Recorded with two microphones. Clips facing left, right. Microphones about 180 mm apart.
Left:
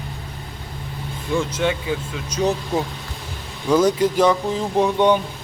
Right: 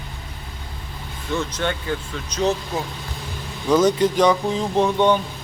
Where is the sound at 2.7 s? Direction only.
25° left (ahead or behind).